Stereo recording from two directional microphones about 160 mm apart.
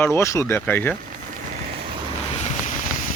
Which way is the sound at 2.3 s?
45° left (ahead or behind).